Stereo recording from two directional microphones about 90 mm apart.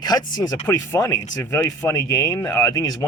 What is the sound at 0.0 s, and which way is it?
Speech, 45° left (ahead or behind).